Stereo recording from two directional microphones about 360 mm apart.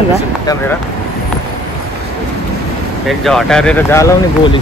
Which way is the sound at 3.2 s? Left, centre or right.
Centre.